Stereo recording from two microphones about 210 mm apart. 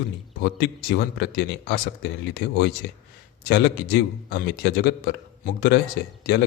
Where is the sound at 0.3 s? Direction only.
50° left (ahead or behind).